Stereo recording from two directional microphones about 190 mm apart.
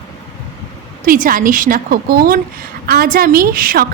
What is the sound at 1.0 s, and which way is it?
A woman's voice, 45° right (ahead or behind).